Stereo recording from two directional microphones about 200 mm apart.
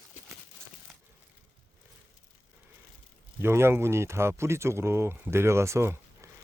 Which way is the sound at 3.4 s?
10° right (ahead or behind).